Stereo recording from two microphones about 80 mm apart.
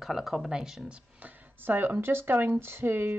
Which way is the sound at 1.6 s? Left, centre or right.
Right.